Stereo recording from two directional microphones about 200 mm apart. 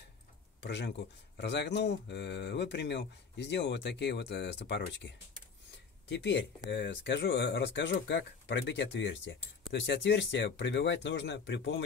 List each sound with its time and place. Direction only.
0.6 s speech: 60° left (ahead or behind)